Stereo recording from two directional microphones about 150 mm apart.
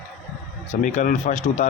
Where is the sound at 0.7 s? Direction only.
55° left (ahead or behind).